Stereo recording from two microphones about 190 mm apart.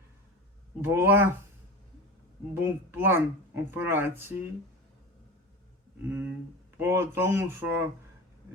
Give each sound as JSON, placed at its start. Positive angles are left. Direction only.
{"t": 0.8, "sound": "speech", "side_deg": -10}
{"t": 2.6, "sound": "speech", "side_deg": -10}
{"t": 6.0, "sound": "speech", "side_deg": -10}